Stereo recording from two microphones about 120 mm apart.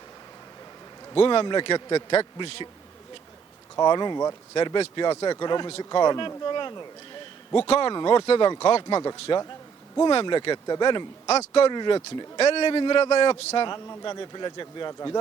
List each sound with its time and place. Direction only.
1.1 s a man's voice: 50° left (ahead or behind)
2.1 s a man's voice: 50° left (ahead or behind)
3.8 s a man's voice: 35° left (ahead or behind)
7.7 s a man's voice: 50° left (ahead or behind)
7.9 s a man's voice: 40° left (ahead or behind)
9.1 s a man's voice: 50° left (ahead or behind)
11.3 s speech: 55° left (ahead or behind)
11.7 s a man's voice: 40° left (ahead or behind)
12.4 s a man's voice: 50° left (ahead or behind)
13.7 s a man's voice: 25° left (ahead or behind)
14.0 s a man's voice: 35° left (ahead or behind)